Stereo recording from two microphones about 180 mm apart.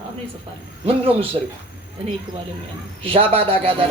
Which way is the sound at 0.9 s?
30° right (ahead or behind).